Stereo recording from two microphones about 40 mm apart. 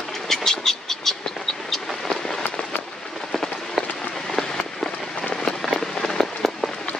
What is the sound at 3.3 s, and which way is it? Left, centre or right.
Rain on surface, centre.